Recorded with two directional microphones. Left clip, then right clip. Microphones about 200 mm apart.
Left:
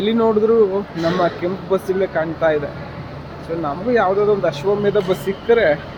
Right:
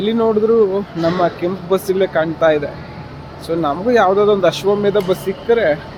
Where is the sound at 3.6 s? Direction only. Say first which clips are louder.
Right 4 dB; 35° right (ahead or behind).